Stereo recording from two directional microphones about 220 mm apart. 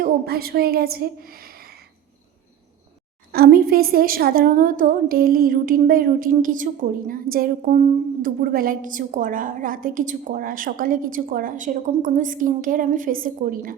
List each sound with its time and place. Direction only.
0.0 s a woman's voice: 45° right (ahead or behind)
3.3 s a woman's voice: 45° right (ahead or behind)